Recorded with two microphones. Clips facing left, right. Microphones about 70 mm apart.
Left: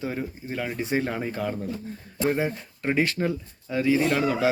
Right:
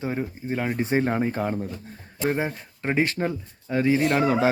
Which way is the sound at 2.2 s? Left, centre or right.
Centre.